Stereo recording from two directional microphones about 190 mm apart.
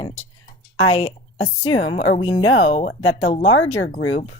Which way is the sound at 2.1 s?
25° left (ahead or behind).